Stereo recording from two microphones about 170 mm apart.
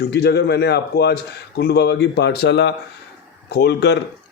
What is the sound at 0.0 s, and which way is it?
A man's voice, 75° left (ahead or behind).